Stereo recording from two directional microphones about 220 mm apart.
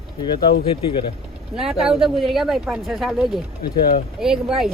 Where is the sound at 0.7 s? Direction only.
25° left (ahead or behind).